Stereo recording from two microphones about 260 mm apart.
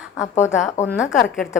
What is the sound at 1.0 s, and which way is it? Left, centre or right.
Speech, centre.